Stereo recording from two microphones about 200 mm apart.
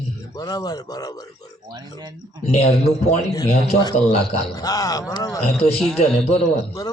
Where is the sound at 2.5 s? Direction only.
35° left (ahead or behind).